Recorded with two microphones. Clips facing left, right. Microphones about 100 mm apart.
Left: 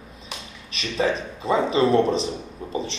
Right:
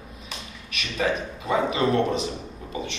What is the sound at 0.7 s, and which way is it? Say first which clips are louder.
A man's voice: left 2 dB; 30° left (ahead or behind).